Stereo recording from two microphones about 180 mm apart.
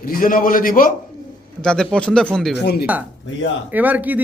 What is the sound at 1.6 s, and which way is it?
Speech, 5° left (ahead or behind).